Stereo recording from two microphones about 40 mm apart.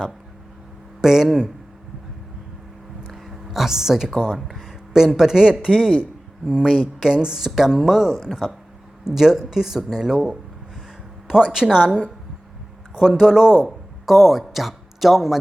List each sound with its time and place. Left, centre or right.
1.0 s speech: centre
3.1 s a sound: centre
4.4 s speech: centre